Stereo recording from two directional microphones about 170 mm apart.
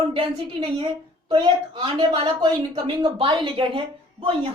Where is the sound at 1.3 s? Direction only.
30° right (ahead or behind).